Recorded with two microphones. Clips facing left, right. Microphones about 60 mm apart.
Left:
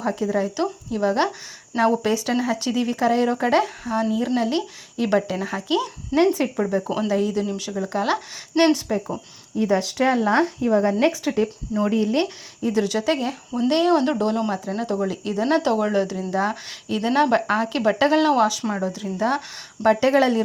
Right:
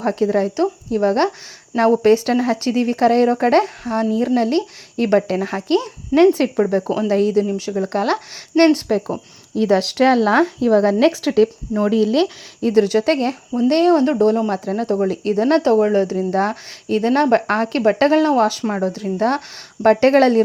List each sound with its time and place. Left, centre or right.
0.0 s speech: right
0.5 s speech: right
6.1 s speech: centre
6.6 s speech: right
7.3 s speech: right
7.9 s speech: right
9.6 s speech: right
11.0 s speech: right
11.9 s speech: right
12.7 s speech: right
15.0 s speech: right
19.0 s speech: right